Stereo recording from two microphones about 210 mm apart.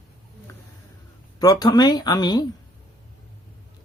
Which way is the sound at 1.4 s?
20° left (ahead or behind).